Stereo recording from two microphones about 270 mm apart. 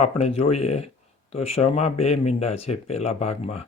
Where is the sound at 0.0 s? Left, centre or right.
Left.